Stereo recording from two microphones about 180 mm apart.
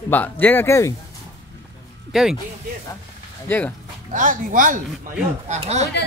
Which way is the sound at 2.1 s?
5° right (ahead or behind).